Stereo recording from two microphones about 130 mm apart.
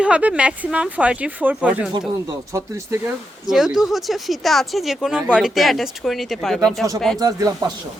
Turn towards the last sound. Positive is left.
turn(degrees=-30)  # may be behind; listen again after turning